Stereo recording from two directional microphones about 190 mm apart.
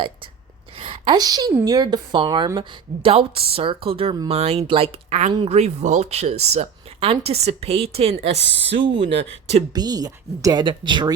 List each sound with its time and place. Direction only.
0.8 s a woman's voice: 25° right (ahead or behind)